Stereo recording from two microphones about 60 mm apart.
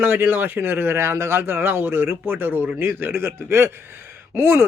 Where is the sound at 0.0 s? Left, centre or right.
Right.